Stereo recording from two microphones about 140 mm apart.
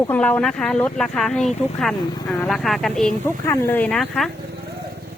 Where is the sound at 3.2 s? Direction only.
15° left (ahead or behind).